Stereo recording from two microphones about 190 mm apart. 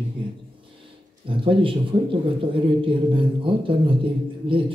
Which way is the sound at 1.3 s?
25° right (ahead or behind).